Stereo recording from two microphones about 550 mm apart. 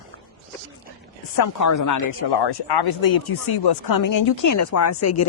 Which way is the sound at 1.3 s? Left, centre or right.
Left.